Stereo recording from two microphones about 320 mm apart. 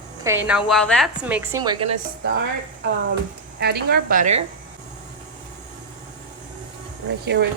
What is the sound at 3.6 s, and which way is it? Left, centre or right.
Speech, right.